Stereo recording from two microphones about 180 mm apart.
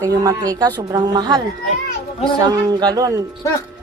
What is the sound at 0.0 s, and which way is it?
Speech, 20° right (ahead or behind).